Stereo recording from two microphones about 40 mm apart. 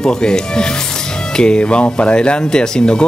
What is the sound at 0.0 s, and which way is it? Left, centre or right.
Speech, centre.